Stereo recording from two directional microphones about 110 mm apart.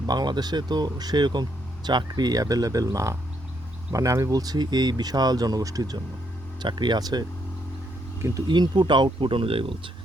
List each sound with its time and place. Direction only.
0.1 s speech: 40° right (ahead or behind)
8.4 s speech: 40° right (ahead or behind)